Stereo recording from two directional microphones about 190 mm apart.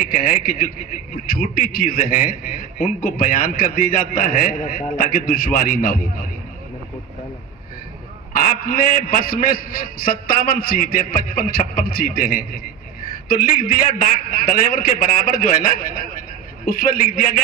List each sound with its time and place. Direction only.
0.0 s a man's voice: 45° left (ahead or behind)
8.3 s a man's voice: 50° left (ahead or behind)